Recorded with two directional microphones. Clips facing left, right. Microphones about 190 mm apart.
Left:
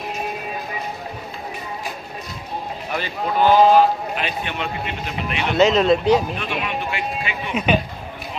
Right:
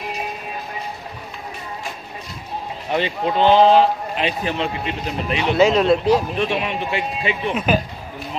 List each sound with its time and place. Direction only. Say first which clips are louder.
2.9 s a man's voice: right 4 dB; 25° right (ahead or behind)
5.4 s speech: right 1 dB; centre (ahead or behind)
6.3 s speech: right 4 dB; 30° right (ahead or behind)
7.5 s speech: left 2 dB; centre (ahead or behind)